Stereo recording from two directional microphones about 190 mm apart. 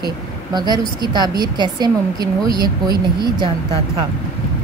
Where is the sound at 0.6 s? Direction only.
20° right (ahead or behind).